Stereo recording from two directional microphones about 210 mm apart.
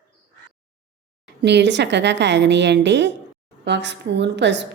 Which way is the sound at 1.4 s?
55° right (ahead or behind).